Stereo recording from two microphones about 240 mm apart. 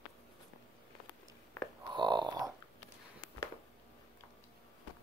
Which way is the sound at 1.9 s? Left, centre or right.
Centre.